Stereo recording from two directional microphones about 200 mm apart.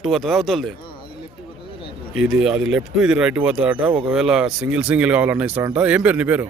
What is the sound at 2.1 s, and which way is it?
Speech, 5° right (ahead or behind).